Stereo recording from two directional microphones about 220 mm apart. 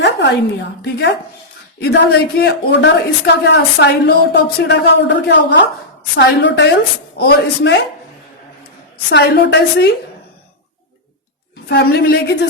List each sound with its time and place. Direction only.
0.0 s a sound: 50° left (ahead or behind)
0.8 s speech: 50° left (ahead or behind)
9.0 s speech: 50° left (ahead or behind)
11.7 s speech: 45° left (ahead or behind)